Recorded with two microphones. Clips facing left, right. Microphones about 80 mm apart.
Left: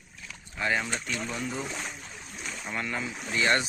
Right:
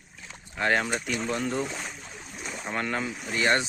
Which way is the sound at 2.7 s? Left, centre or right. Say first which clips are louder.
Right 4 dB; right.